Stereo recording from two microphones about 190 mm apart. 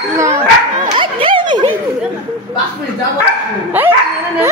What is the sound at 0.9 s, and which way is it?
Dog, 25° right (ahead or behind).